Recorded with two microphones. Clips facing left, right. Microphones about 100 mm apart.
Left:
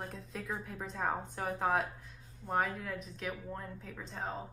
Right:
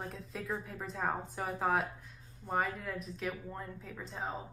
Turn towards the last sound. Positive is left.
turn(degrees=-5)  # may be behind; listen again after turning